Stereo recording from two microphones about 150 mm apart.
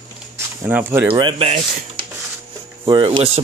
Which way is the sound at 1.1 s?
35° right (ahead or behind).